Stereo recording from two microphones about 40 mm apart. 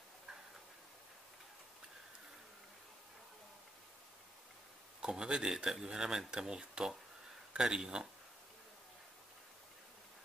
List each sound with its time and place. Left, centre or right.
5.0 s speech: centre